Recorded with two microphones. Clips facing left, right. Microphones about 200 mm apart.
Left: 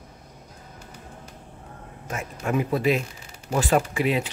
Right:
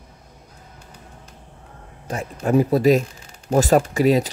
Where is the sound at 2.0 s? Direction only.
35° right (ahead or behind).